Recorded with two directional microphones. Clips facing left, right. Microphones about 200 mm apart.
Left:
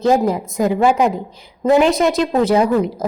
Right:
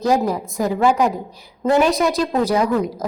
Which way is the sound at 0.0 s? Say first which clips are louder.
Left 3 dB; 25° left (ahead or behind).